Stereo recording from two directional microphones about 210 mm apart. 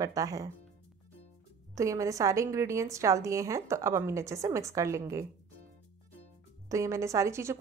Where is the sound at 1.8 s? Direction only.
15° right (ahead or behind).